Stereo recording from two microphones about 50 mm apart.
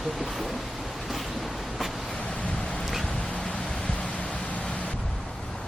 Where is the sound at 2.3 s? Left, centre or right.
Centre.